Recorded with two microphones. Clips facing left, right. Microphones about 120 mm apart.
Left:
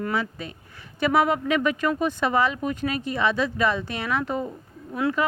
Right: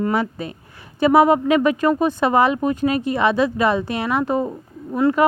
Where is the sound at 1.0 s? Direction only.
35° right (ahead or behind).